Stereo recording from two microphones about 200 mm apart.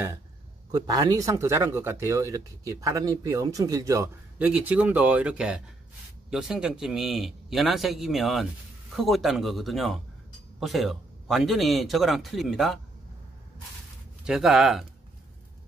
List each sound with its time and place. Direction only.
0.7 s a man's voice: 20° right (ahead or behind); by 12.8 s centre (ahead or behind)
14.2 s a man's voice: centre (ahead or behind)